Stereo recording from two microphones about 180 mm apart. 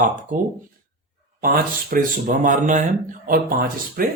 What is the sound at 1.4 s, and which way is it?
Speech, 50° right (ahead or behind).